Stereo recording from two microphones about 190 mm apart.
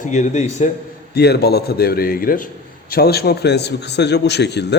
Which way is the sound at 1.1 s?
60° left (ahead or behind).